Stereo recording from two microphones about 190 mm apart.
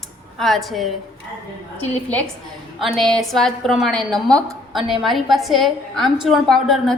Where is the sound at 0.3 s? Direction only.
Centre (ahead or behind).